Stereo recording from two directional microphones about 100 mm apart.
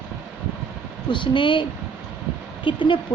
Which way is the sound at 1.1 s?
55° left (ahead or behind).